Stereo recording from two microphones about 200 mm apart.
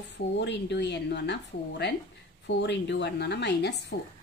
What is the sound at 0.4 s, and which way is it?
A woman's voice, 60° left (ahead or behind).